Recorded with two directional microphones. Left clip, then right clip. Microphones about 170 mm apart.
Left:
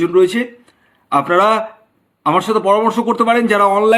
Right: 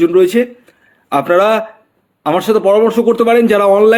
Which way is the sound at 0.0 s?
35° right (ahead or behind).